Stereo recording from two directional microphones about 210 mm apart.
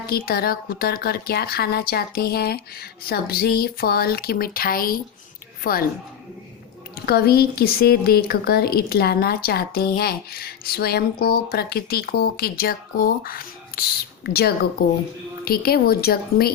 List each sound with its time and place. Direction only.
0.1 s a woman's voice: 45° left (ahead or behind)
7.0 s a woman's voice: 45° left (ahead or behind)